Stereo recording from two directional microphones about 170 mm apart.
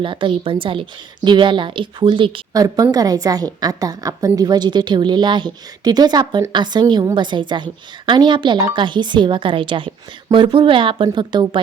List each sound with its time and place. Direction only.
0.0 s a woman's voice: 30° right (ahead or behind)